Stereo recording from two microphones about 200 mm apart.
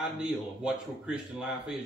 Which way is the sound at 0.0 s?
5° right (ahead or behind).